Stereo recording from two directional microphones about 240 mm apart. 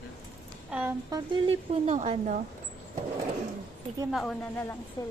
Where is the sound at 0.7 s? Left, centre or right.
Centre.